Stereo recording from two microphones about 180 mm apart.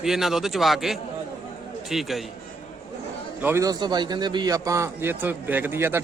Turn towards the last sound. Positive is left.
turn(degrees=-15)  # may be behind; listen again after turning